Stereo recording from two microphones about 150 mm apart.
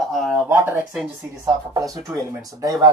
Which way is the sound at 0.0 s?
Centre (ahead or behind).